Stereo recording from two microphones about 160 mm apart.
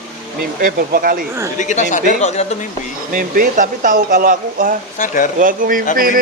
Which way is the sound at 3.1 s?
60° right (ahead or behind).